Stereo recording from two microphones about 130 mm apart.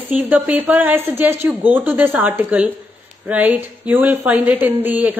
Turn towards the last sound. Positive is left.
turn(degrees=-15)  # may be behind; listen again after turning